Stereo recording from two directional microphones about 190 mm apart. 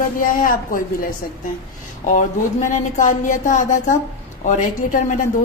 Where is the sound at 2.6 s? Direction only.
40° left (ahead or behind).